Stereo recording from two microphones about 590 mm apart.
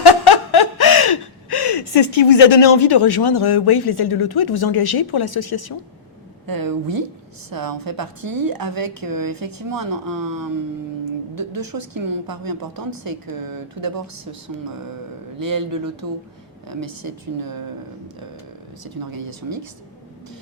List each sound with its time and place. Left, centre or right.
0.0 s chuckle: left
1.5 s speech: left
6.4 s a woman's voice: right
15.4 s a woman's voice: right